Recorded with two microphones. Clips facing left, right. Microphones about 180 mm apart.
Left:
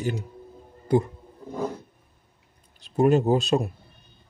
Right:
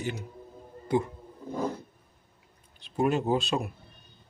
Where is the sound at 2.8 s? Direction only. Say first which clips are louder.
Left 6 dB; 40° left (ahead or behind).